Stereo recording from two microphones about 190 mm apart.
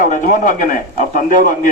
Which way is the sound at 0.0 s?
45° left (ahead or behind).